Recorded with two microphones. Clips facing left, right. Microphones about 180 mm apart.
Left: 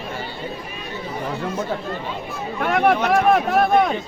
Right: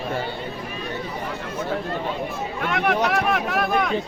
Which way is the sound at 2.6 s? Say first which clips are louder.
Left 4 dB; 40° left (ahead or behind).